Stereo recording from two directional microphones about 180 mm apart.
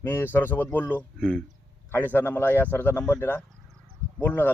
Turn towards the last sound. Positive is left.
turn(degrees=10)  # may be behind; listen again after turning